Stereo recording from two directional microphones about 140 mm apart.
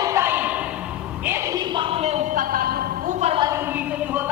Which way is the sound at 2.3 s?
90° right.